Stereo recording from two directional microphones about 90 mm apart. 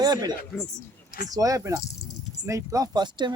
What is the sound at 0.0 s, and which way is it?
Speech, 50° right (ahead or behind).